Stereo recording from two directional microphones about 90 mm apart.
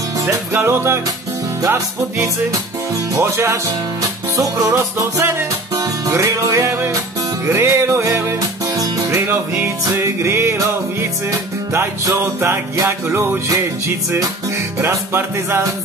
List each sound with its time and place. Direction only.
0.2 s music: 30° right (ahead or behind)
4.0 s music: 45° right (ahead or behind)
12.1 s music: 30° right (ahead or behind)